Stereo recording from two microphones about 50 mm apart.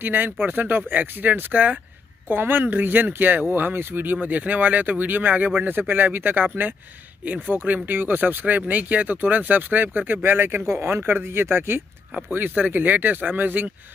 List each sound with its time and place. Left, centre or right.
0.0 s speech: right
10.7 s speech: right